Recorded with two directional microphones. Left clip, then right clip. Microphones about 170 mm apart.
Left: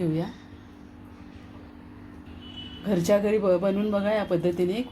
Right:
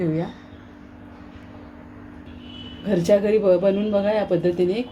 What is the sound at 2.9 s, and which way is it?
A man's voice, 15° left (ahead or behind).